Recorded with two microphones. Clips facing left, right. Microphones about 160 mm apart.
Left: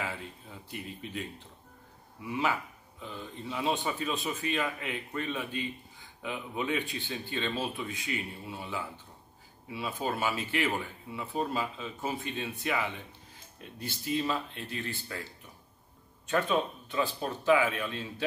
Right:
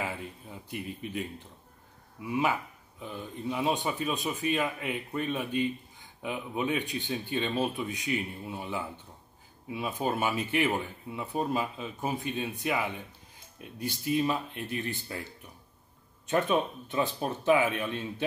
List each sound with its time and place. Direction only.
0.0 s speech: 15° right (ahead or behind)
3.0 s speech: 15° right (ahead or behind)
16.3 s speech: 20° right (ahead or behind)